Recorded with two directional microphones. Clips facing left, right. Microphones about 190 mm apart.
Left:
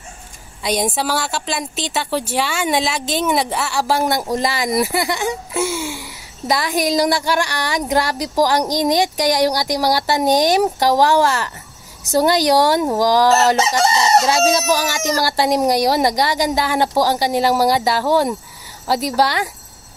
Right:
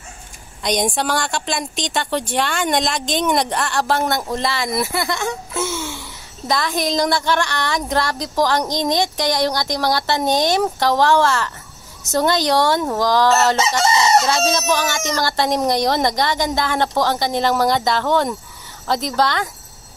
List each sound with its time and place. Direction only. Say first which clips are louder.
0.6 s speech: even; 5° left (ahead or behind)
13.6 s chicken: left 2 dB; 40° left (ahead or behind)
14.0 s speech: left 2 dB; 10° left (ahead or behind)